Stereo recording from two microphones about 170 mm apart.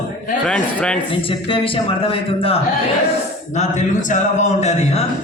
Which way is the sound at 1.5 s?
30° left (ahead or behind).